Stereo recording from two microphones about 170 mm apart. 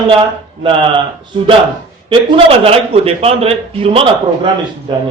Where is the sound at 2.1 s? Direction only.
30° right (ahead or behind).